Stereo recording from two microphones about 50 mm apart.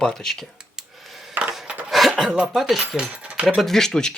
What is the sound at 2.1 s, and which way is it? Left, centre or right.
Speech, centre.